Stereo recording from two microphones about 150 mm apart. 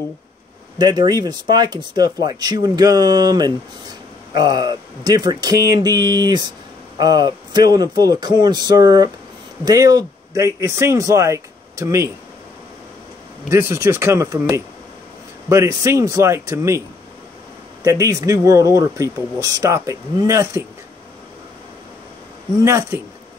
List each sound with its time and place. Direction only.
0.7 s speech: 25° right (ahead or behind)
13.5 s speech: 20° right (ahead or behind)
15.5 s speech: 20° right (ahead or behind)
17.8 s speech: 20° right (ahead or behind)
22.6 s speech: 20° right (ahead or behind)